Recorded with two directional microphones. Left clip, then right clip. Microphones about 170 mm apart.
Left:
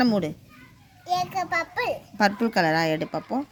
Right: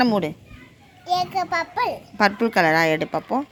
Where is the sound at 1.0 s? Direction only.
20° left (ahead or behind).